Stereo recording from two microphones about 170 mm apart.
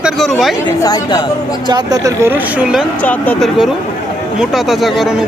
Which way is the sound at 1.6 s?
25° right (ahead or behind).